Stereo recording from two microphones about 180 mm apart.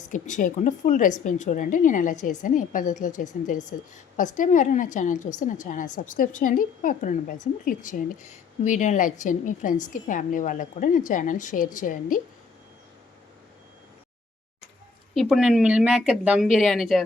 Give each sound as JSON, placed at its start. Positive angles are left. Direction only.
{"t": 0.1, "sound": "a woman's voice", "side_deg": 45}
{"t": 15.1, "sound": "speech", "side_deg": 0}